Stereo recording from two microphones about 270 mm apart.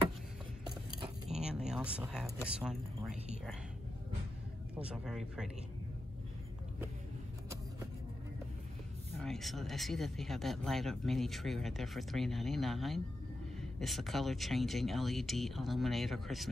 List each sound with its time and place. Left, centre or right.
1.0 s a sound: right
1.5 s speech: centre
4.7 s speech: centre
9.1 s speech: centre